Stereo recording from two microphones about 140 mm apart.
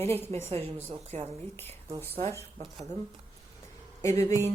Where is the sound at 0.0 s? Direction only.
15° left (ahead or behind).